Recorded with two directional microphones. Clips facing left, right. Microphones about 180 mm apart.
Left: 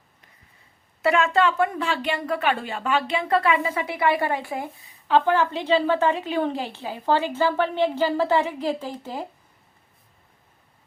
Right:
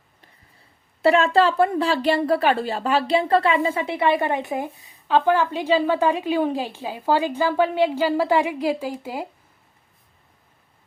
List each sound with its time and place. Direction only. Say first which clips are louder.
1.0 s speech: right 3 dB; 30° right (ahead or behind); by 9.2 s 10° right (ahead or behind)